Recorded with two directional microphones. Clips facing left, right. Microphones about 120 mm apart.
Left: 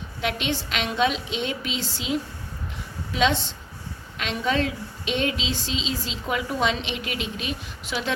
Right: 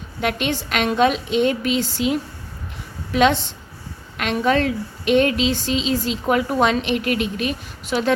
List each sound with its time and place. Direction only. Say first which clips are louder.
0.2 s a woman's voice: right 5 dB; 50° right (ahead or behind)